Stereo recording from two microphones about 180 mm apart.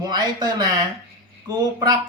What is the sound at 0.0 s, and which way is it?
Speech, 25° right (ahead or behind).